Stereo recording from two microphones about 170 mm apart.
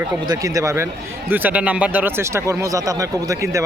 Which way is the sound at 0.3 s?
20° right (ahead or behind).